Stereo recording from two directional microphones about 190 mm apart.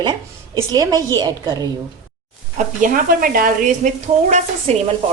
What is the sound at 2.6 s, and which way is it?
Speech, 45° right (ahead or behind).